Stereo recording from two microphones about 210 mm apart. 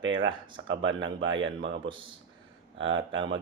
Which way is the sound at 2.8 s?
65° right (ahead or behind).